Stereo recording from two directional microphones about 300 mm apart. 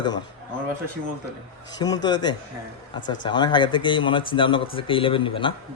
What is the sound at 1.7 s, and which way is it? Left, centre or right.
Speech, centre.